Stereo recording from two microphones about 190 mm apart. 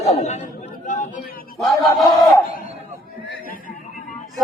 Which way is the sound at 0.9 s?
40° left (ahead or behind).